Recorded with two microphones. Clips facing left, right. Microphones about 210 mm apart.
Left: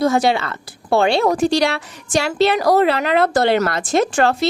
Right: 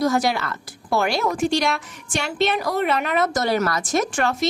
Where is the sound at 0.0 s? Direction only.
25° left (ahead or behind).